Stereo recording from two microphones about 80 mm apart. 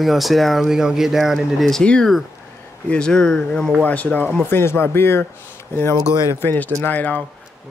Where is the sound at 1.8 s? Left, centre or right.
Centre.